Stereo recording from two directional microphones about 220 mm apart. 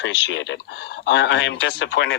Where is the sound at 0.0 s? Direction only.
55° left (ahead or behind).